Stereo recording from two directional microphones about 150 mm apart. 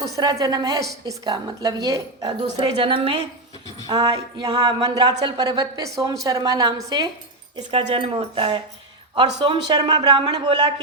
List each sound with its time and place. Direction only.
0.2 s a woman's voice: 25° right (ahead or behind)
3.8 s a woman's voice: 25° right (ahead or behind)
7.7 s a woman's voice: 40° right (ahead or behind)